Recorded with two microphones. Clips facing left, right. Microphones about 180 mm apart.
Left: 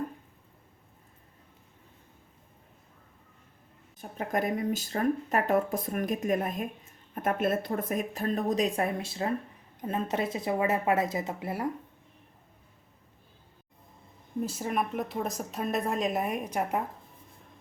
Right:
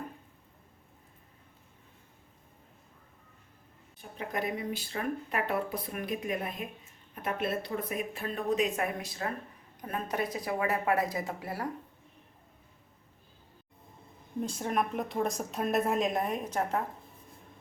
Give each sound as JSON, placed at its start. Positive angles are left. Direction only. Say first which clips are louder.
{"t": 3.9, "sound": "a woman's voice", "louder": "left 5 dB", "side_deg": 45}
{"t": 14.4, "sound": "a woman's voice", "louder": "even", "side_deg": 5}